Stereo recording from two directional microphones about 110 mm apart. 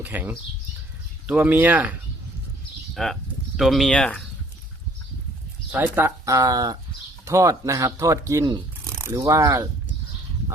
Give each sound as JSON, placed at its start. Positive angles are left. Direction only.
{"t": 0.0, "sound": "speech", "side_deg": -15}
{"t": 2.9, "sound": "speech", "side_deg": 0}
{"t": 5.7, "sound": "speech", "side_deg": -20}